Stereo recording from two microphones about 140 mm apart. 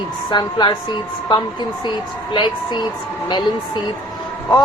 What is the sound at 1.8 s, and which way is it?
A woman's voice, 35° left (ahead or behind).